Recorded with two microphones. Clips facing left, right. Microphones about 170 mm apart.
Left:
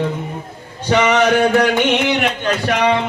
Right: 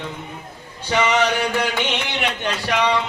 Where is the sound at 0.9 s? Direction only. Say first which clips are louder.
Left 5 dB; 50° left (ahead or behind).